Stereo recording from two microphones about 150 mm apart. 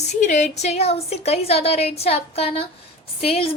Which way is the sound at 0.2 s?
50° left (ahead or behind).